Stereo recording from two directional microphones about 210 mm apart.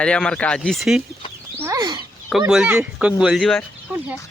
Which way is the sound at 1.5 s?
15° right (ahead or behind).